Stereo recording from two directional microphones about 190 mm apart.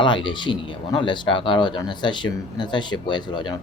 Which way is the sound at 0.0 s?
25° left (ahead or behind).